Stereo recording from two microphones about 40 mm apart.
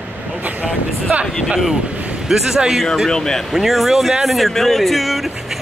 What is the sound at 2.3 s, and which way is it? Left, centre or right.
Speech, centre.